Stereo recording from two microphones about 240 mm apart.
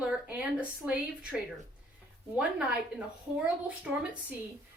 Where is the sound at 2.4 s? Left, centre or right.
Centre.